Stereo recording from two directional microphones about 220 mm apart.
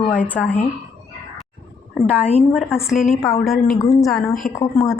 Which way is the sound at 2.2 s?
25° left (ahead or behind).